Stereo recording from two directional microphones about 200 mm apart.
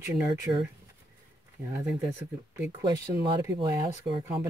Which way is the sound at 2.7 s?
20° right (ahead or behind).